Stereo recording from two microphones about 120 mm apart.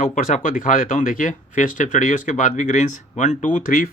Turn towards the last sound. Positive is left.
turn(degrees=90)